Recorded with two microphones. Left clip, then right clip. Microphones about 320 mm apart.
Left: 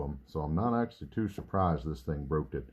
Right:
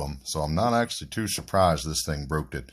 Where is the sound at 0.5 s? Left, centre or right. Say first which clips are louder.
Right 8 dB; right.